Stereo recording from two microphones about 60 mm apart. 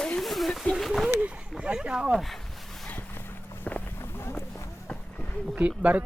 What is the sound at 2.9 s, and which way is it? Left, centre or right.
Boat, left.